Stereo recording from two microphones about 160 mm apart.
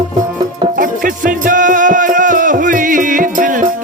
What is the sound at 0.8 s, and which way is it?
Music, 55° right (ahead or behind).